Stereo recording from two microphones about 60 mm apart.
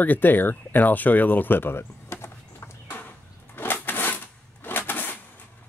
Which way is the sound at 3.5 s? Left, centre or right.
Left.